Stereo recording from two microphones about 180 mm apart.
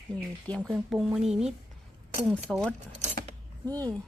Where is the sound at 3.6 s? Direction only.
10° left (ahead or behind).